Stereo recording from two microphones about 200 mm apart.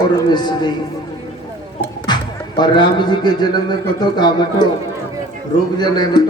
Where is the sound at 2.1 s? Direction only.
20° left (ahead or behind).